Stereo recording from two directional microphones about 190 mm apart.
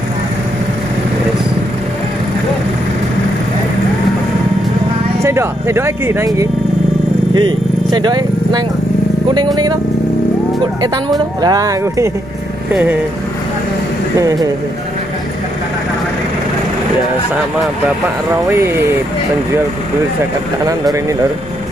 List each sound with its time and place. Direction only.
5.2 s speech: 15° right (ahead or behind)
7.3 s vehicle: 25° right (ahead or behind)
9.3 s a woman's voice: 20° right (ahead or behind)
10.8 s a woman's voice: 20° right (ahead or behind)
18.5 s speech: 15° right (ahead or behind)